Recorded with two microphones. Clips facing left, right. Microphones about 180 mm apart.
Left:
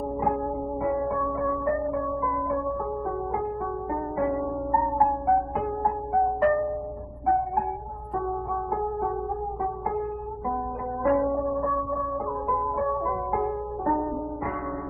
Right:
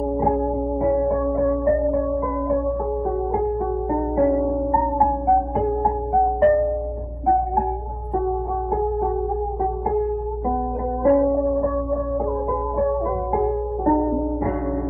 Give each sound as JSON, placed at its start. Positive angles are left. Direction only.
{"t": 0.8, "sound": "music", "side_deg": -35}
{"t": 3.9, "sound": "music", "side_deg": -35}
{"t": 11.1, "sound": "music", "side_deg": -30}
{"t": 13.4, "sound": "music", "side_deg": -30}